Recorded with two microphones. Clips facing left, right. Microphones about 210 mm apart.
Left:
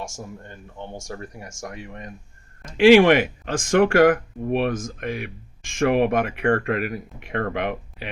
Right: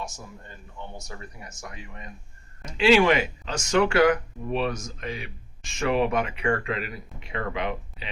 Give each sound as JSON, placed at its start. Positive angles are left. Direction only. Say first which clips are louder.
{"t": 0.0, "sound": "speech", "louder": "left 4 dB", "side_deg": 50}